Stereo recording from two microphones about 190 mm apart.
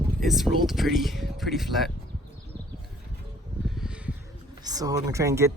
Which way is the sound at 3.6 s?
Centre (ahead or behind).